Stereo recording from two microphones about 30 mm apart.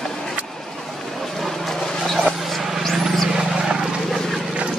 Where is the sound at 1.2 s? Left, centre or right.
Centre.